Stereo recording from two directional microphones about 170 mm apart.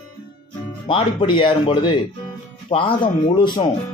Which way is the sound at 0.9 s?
30° left (ahead or behind).